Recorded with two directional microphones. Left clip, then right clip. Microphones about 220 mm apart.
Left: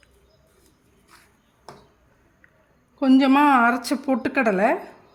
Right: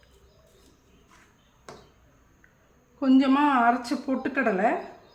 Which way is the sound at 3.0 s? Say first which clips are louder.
Left 5 dB; 40° left (ahead or behind).